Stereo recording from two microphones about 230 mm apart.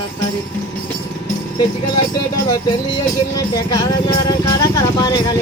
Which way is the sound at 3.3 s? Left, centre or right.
Centre.